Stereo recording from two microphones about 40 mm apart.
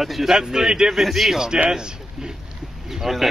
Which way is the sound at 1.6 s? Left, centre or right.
Centre.